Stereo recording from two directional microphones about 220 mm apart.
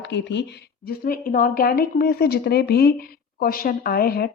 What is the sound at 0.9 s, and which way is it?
Speech, 40° left (ahead or behind).